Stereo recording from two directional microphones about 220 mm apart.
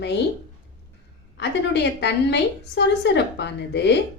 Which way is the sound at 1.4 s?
50° left (ahead or behind).